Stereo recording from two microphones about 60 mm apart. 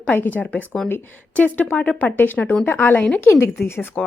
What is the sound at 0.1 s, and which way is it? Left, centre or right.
Speech, left.